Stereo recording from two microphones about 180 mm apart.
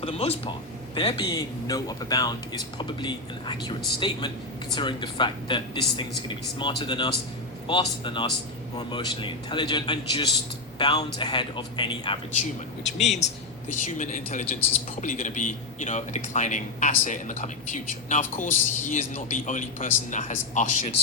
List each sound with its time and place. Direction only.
0.0 s a man's voice: 35° left (ahead or behind)
0.9 s speech: 25° left (ahead or behind)
12.4 s a man's voice: 40° left (ahead or behind)